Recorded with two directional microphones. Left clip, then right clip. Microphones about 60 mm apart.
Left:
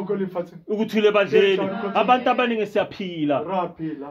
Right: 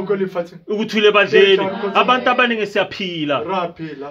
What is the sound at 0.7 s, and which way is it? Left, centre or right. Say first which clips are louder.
A man's voice: right 5 dB; left.